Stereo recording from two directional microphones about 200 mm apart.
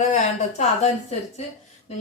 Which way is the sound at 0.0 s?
35° left (ahead or behind).